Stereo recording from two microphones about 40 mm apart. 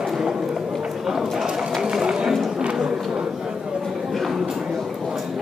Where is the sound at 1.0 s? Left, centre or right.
Centre.